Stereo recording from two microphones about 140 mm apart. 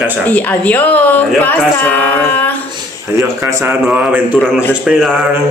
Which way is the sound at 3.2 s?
20° right (ahead or behind).